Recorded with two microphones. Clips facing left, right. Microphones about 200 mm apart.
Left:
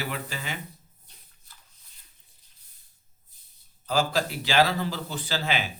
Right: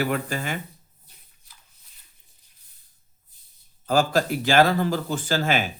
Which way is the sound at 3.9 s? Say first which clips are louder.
Right 5 dB; 50° right (ahead or behind).